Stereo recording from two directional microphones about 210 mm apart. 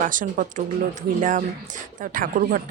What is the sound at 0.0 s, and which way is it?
Speech, 40° right (ahead or behind).